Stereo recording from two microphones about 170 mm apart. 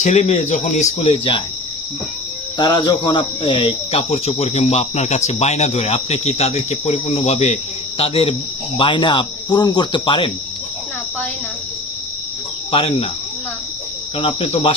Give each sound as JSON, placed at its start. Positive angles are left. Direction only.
{"t": 0.0, "sound": "speech", "side_deg": 40}
{"t": 2.6, "sound": "speech", "side_deg": 25}
{"t": 8.8, "sound": "cricket", "side_deg": 30}
{"t": 12.7, "sound": "speech", "side_deg": 30}
{"t": 14.2, "sound": "speech", "side_deg": 35}